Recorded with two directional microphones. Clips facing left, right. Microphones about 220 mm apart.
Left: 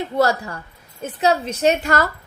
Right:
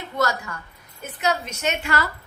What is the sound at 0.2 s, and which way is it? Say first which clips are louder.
A woman's voice: left 5 dB; 35° left (ahead or behind).